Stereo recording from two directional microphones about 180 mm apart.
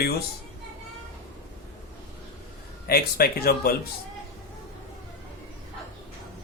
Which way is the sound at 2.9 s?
60° left (ahead or behind).